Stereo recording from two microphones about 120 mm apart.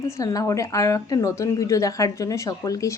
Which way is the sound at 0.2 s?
25° left (ahead or behind).